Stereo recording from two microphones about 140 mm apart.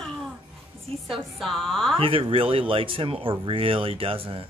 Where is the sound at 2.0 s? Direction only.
40° right (ahead or behind).